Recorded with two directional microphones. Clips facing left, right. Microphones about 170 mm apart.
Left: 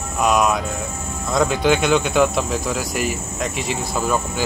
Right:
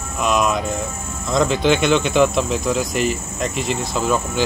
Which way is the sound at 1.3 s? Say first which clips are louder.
Right 1 dB; 10° left (ahead or behind).